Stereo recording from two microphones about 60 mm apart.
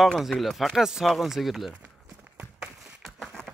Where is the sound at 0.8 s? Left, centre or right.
Centre.